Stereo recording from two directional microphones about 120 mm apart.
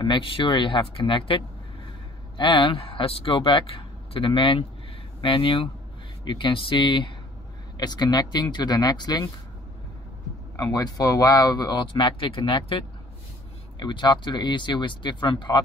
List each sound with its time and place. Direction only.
0.0 s speech: 45° left (ahead or behind)
10.5 s speech: 30° left (ahead or behind)